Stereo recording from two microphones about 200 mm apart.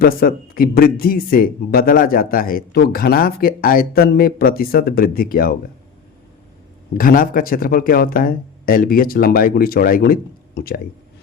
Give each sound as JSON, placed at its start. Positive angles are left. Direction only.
{"t": 0.0, "sound": "speech", "side_deg": 45}
{"t": 6.9, "sound": "speech", "side_deg": 45}